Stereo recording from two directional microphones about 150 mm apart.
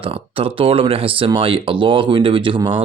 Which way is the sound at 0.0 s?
40° right (ahead or behind).